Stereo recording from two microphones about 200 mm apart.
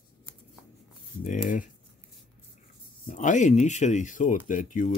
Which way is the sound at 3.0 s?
40° left (ahead or behind).